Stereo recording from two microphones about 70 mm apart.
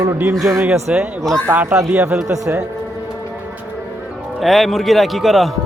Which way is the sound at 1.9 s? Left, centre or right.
Centre.